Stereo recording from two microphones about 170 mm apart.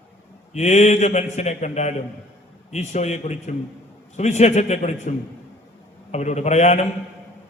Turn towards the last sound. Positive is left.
turn(degrees=40)  # may be behind; listen again after turning